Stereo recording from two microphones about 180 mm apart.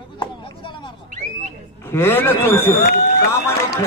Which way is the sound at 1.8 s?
10° left (ahead or behind).